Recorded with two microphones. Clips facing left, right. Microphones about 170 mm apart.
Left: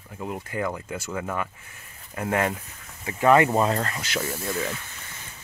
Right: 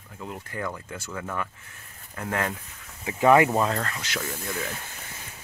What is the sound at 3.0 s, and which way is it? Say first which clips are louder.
Speech: even; 15° right (ahead or behind).